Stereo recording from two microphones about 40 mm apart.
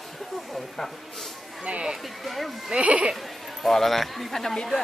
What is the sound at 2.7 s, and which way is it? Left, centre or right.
Bleat, centre.